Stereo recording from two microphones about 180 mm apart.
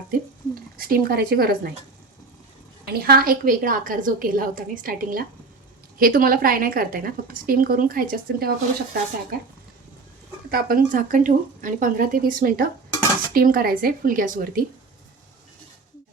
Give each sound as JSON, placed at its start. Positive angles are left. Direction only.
{"t": 0.8, "sound": "speech", "side_deg": -55}
{"t": 2.8, "sound": "a woman's voice", "side_deg": -60}
{"t": 10.5, "sound": "a woman's voice", "side_deg": -50}